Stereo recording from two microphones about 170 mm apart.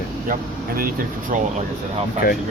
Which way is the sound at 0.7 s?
60° right (ahead or behind).